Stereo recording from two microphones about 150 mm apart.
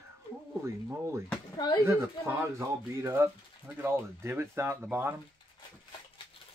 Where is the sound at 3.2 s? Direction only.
15° right (ahead or behind).